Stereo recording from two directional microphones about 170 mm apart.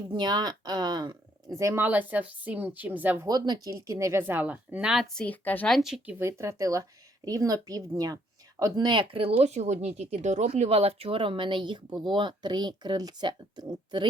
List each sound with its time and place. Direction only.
0.1 s a woman's voice: 25° right (ahead or behind)
3.2 s a woman's voice: 25° right (ahead or behind)